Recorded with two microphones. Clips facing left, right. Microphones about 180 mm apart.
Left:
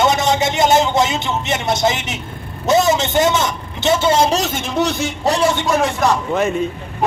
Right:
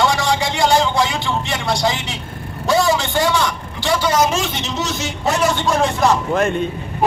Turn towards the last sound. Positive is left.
turn(degrees=0)  # may be behind; listen again after turning